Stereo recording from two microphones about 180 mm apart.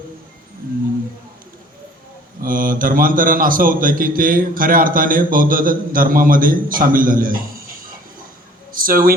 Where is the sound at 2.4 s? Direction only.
50° right (ahead or behind).